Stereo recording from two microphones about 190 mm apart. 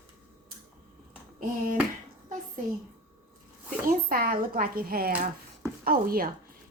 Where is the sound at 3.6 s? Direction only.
50° right (ahead or behind).